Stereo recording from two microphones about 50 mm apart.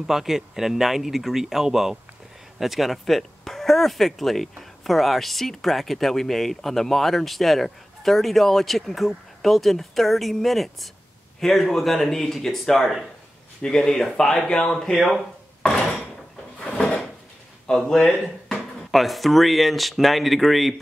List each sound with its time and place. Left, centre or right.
0.0 s speech: centre
16.5 s a sound: centre
17.6 s speech: centre
18.5 s speech: centre